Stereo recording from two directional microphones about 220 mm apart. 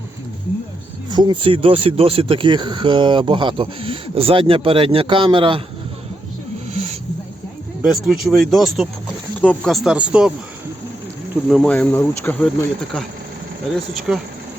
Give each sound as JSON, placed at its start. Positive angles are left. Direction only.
{"t": 1.1, "sound": "speech", "side_deg": -20}
{"t": 7.8, "sound": "speech", "side_deg": 0}
{"t": 11.4, "sound": "speech", "side_deg": 0}
{"t": 14.1, "sound": "speech", "side_deg": -5}